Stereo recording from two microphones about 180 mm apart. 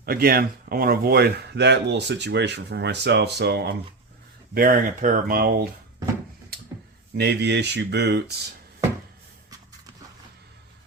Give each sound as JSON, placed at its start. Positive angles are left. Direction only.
{"t": 0.0, "sound": "speech", "side_deg": -55}
{"t": 4.5, "sound": "speech", "side_deg": -50}
{"t": 7.2, "sound": "speech", "side_deg": -70}